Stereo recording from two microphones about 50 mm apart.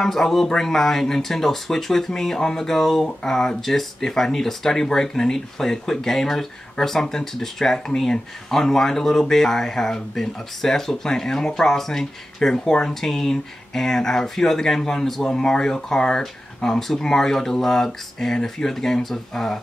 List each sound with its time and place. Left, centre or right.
0.0 s speech: centre